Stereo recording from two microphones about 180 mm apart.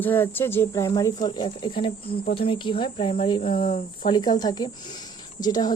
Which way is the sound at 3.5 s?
55° left (ahead or behind).